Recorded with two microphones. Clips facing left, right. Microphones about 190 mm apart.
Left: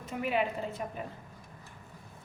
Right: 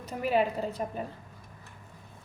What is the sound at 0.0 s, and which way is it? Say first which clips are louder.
Speech: right 4 dB; 40° right (ahead or behind).